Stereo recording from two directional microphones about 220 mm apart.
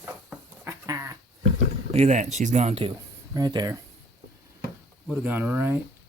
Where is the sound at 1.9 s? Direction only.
30° right (ahead or behind).